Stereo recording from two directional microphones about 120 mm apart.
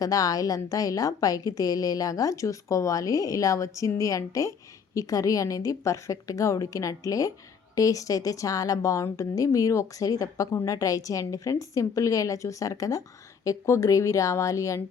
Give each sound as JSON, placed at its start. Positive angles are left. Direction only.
{"t": 0.0, "sound": "a woman's voice", "side_deg": 30}